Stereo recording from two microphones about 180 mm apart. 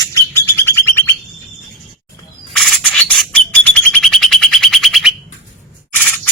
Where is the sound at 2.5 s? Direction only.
Centre (ahead or behind).